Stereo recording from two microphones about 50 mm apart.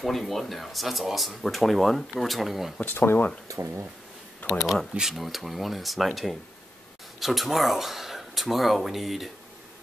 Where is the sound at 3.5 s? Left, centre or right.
Right.